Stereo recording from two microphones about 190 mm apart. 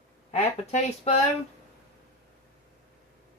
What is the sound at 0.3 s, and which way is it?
Speech, 35° left (ahead or behind).